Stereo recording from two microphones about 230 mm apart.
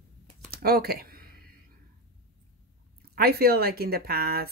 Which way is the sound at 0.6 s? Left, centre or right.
Right.